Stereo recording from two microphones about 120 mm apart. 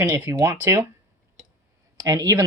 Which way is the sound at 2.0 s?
30° right (ahead or behind).